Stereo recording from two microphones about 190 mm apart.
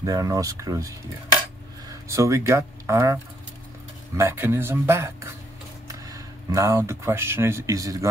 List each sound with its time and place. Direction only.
0.0 s speech: 20° right (ahead or behind)
4.2 s speech: 15° right (ahead or behind)